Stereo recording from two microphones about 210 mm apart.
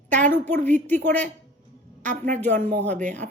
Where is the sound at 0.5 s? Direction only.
10° left (ahead or behind).